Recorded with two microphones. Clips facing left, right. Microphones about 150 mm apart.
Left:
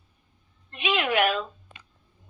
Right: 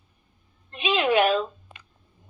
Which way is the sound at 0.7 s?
25° right (ahead or behind).